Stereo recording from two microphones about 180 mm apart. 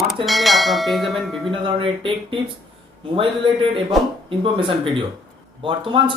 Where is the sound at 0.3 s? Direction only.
Centre (ahead or behind).